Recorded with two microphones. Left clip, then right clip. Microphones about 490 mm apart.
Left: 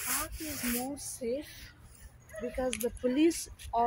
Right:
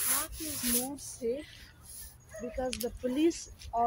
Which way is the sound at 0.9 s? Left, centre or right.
Centre.